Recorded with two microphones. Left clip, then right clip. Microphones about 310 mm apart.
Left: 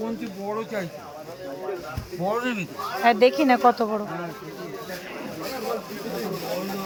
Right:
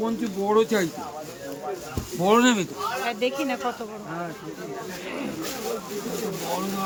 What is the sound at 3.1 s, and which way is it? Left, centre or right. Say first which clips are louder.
Speech: left 12 dB; centre.